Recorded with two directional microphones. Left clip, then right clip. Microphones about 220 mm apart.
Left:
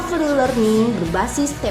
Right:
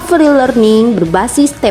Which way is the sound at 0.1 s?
40° right (ahead or behind).